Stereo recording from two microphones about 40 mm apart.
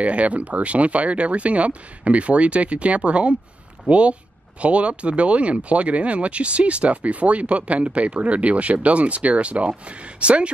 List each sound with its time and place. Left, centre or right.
0.0 s speech: right